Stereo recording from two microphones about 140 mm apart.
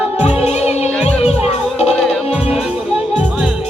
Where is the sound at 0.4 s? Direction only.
50° left (ahead or behind).